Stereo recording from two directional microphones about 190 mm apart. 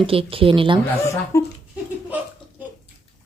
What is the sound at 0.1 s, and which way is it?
Speech, 30° right (ahead or behind).